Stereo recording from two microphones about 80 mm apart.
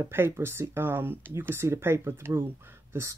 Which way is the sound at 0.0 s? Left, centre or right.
Right.